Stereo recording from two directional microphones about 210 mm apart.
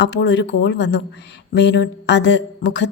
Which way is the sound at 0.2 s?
55° left (ahead or behind).